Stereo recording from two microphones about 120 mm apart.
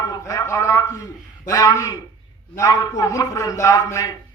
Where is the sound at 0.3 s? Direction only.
25° left (ahead or behind).